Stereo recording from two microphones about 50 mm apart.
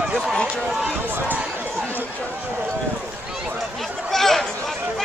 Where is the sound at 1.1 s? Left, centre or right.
Right.